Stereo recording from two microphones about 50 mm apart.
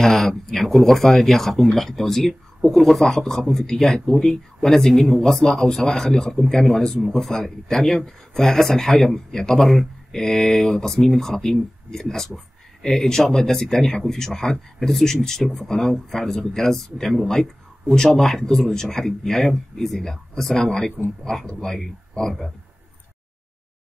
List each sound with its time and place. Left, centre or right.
0.0 s speech: centre